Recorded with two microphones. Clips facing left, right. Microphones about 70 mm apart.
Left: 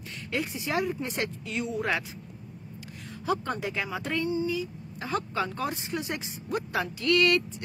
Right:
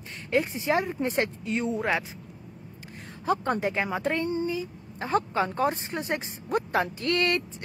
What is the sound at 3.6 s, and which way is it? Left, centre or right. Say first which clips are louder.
Speech: right 5 dB; right.